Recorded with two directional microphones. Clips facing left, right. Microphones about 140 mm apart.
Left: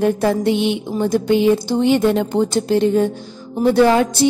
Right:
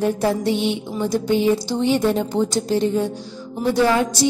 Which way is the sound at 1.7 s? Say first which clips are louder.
Left 4 dB; 60° left (ahead or behind).